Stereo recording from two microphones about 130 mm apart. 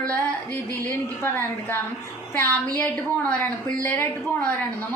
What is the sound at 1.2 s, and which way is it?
A woman's voice, 15° left (ahead or behind).